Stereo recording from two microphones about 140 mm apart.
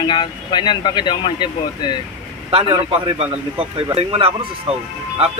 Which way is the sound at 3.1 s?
45° right (ahead or behind).